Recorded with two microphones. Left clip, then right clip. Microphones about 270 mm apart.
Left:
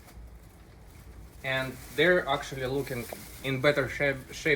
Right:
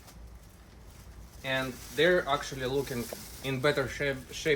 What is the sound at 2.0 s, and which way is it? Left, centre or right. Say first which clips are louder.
Speech: left 1 dB; centre.